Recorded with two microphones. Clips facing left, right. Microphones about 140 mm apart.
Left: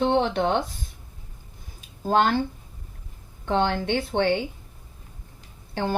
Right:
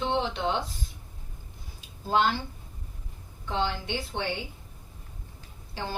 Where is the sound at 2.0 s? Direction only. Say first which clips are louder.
Left 4 dB; 55° left (ahead or behind).